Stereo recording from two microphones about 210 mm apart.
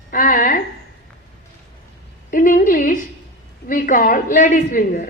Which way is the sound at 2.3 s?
40° left (ahead or behind).